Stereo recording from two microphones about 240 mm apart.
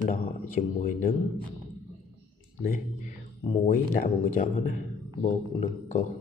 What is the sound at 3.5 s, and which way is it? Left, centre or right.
A man's voice, left.